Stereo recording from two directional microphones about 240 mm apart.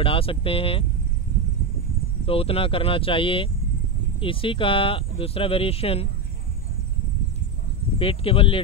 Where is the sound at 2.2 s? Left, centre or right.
Left.